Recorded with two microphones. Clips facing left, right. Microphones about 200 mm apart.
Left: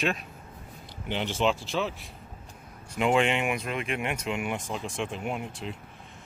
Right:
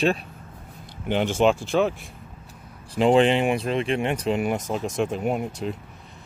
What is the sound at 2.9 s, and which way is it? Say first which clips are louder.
Speech: right 7 dB; 30° right (ahead or behind).